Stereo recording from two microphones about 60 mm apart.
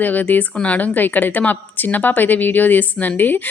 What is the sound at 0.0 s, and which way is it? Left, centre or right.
A woman's voice, left.